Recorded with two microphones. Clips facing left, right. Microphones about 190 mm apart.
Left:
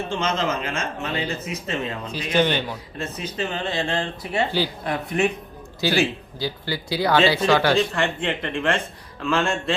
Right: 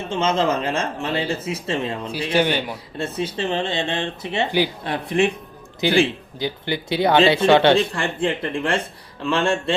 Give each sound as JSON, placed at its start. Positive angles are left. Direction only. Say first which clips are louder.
{"t": 0.1, "sound": "speech", "louder": "right 7 dB", "side_deg": -25}
{"t": 2.3, "sound": "speech", "louder": "even", "side_deg": -10}
{"t": 3.0, "sound": "speech", "louder": "right 4 dB", "side_deg": -30}